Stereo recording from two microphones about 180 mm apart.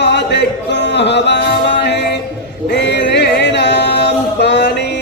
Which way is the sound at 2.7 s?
70° left (ahead or behind).